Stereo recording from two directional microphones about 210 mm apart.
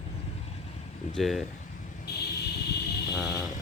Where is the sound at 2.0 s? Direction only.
50° left (ahead or behind).